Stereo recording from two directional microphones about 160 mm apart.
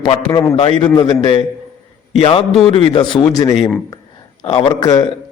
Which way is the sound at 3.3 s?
20° left (ahead or behind).